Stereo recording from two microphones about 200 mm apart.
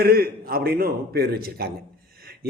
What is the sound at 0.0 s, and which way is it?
A man's voice, 50° right (ahead or behind).